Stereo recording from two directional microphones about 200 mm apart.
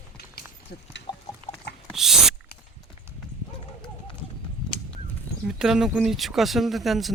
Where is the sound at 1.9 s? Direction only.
Centre (ahead or behind).